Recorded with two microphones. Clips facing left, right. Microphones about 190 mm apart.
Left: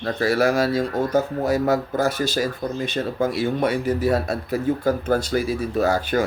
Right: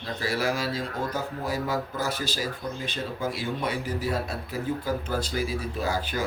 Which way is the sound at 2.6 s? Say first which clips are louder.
Left 7 dB; 45° left (ahead or behind).